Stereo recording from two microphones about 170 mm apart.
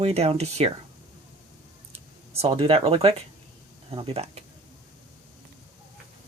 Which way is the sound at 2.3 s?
35° right (ahead or behind).